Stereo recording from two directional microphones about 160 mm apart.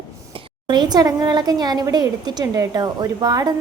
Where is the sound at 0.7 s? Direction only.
25° right (ahead or behind).